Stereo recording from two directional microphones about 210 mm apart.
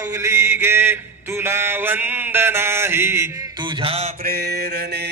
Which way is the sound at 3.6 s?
25° right (ahead or behind).